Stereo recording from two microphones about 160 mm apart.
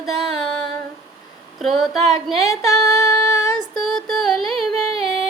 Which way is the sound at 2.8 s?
20° left (ahead or behind).